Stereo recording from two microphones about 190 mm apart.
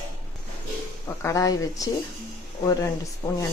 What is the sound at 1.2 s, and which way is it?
Speech, 15° left (ahead or behind).